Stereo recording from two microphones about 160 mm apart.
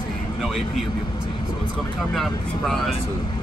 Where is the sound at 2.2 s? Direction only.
Centre (ahead or behind).